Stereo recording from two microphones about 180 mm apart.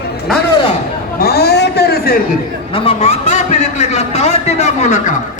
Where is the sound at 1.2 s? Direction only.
60° left (ahead or behind).